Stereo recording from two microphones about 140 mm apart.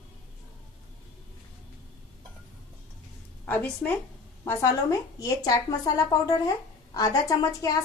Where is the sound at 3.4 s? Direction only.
10° left (ahead or behind).